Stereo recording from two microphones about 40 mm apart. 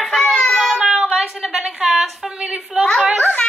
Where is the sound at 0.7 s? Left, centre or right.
Centre.